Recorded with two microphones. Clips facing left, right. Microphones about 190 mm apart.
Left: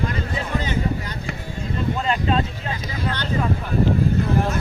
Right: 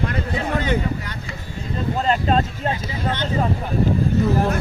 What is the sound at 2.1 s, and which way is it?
Speech, 40° right (ahead or behind).